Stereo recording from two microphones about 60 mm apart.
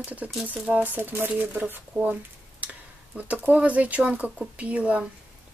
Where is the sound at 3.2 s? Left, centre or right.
Right.